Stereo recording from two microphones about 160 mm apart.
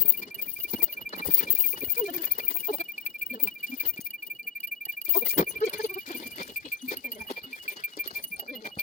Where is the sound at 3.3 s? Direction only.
45° left (ahead or behind).